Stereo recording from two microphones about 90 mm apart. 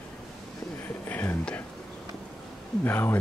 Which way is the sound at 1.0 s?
20° left (ahead or behind).